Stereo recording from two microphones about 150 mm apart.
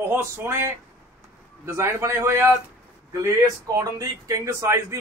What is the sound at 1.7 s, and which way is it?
Speech, 15° right (ahead or behind).